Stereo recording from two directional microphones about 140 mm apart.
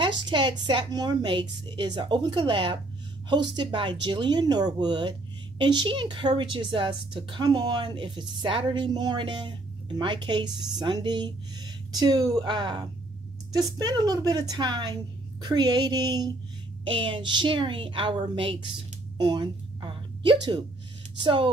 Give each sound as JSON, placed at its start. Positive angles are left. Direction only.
{"t": 0.0, "sound": "a woman's voice", "side_deg": -35}
{"t": 19.1, "sound": "a sound", "side_deg": -30}
{"t": 21.2, "sound": "a woman's voice", "side_deg": -35}